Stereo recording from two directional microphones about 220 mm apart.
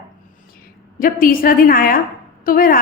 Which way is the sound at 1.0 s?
40° left (ahead or behind).